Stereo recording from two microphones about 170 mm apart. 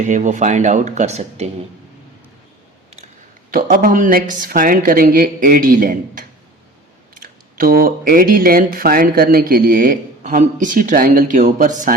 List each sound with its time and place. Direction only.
0.0 s speech: 45° right (ahead or behind)
3.5 s speech: 60° right (ahead or behind)